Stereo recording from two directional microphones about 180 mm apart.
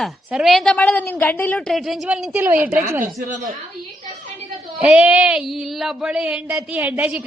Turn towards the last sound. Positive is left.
turn(degrees=-10)  # may be behind; listen again after turning